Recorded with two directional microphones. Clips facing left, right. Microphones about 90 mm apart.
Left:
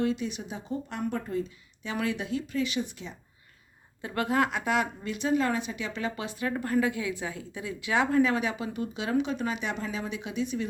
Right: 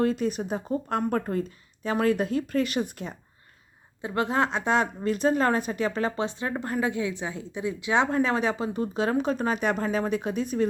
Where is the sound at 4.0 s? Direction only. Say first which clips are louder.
Right 2 dB; 20° right (ahead or behind).